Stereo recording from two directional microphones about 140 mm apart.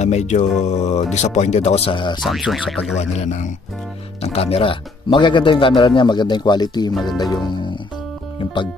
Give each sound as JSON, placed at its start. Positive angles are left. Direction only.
{"t": 0.0, "sound": "speech", "side_deg": 55}
{"t": 2.2, "sound": "speech", "side_deg": 0}
{"t": 3.0, "sound": "speech", "side_deg": 55}
{"t": 4.2, "sound": "speech", "side_deg": 45}
{"t": 6.9, "sound": "speech", "side_deg": 0}
{"t": 7.4, "sound": "music", "side_deg": 35}